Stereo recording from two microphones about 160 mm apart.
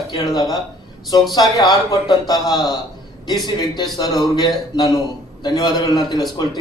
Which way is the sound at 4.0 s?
25° left (ahead or behind).